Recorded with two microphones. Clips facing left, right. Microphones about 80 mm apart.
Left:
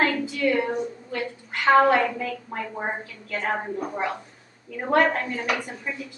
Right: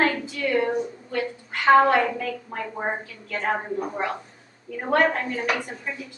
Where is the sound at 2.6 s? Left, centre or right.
Centre.